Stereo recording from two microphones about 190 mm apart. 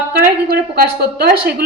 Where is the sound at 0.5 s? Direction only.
55° right (ahead or behind).